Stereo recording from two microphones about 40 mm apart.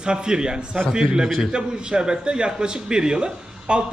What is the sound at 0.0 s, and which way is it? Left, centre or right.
A man's voice, right.